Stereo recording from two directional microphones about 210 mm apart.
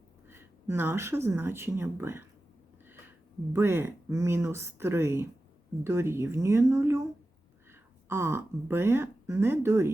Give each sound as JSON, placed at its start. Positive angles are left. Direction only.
{"t": 0.3, "sound": "speech", "side_deg": -10}
{"t": 3.5, "sound": "a woman's voice", "side_deg": -10}